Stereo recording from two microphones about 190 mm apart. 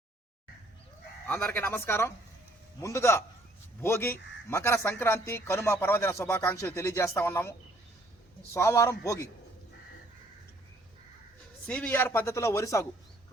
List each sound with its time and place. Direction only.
1.3 s a man's voice: 10° left (ahead or behind)
8.5 s a man's voice: 15° left (ahead or behind)
11.6 s a man's voice: 10° left (ahead or behind)